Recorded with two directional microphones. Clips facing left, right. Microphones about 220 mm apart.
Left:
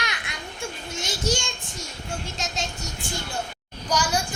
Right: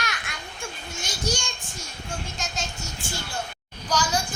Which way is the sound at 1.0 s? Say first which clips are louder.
Left 3 dB; 25° left (ahead or behind).